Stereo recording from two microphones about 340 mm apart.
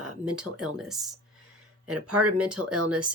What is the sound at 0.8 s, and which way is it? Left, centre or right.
Speech, centre.